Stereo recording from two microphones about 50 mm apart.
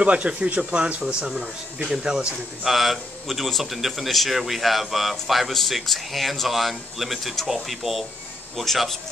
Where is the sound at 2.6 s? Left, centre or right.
Centre.